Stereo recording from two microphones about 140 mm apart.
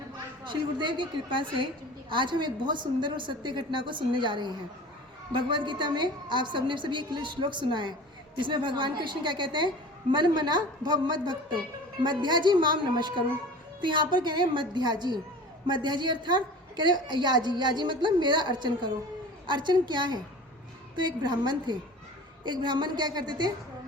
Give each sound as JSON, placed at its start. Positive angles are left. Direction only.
{"t": 0.4, "sound": "a woman's voice", "side_deg": -35}